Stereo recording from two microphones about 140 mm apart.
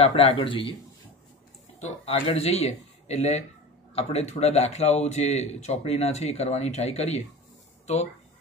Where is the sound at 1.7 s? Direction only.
50° left (ahead or behind).